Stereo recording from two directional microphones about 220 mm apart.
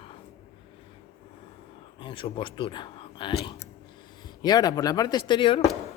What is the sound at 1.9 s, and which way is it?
Speech, 25° left (ahead or behind).